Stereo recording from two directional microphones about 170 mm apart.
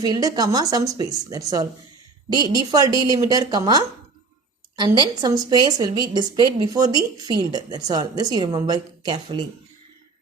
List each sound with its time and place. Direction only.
0.0 s a woman's voice: 25° right (ahead or behind)
4.9 s a woman's voice: 25° right (ahead or behind)